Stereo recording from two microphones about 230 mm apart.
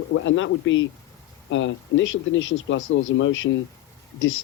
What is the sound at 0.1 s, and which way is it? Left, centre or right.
Speech, left.